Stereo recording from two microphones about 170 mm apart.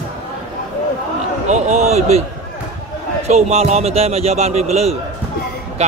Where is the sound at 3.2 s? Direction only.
40° right (ahead or behind).